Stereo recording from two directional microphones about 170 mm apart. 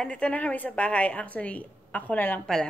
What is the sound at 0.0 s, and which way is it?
Speech, 5° left (ahead or behind).